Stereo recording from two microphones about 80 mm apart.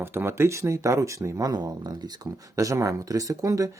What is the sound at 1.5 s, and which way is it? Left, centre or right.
Speech, right.